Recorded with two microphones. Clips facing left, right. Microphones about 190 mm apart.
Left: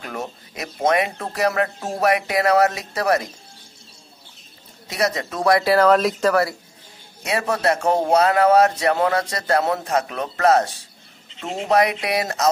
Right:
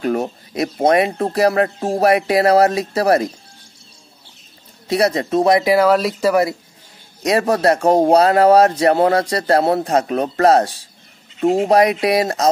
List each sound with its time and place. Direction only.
0.0 s speech: 35° right (ahead or behind)
4.8 s speech: 30° right (ahead or behind); by 6.3 s 5° right (ahead or behind)
7.2 s speech: 40° right (ahead or behind)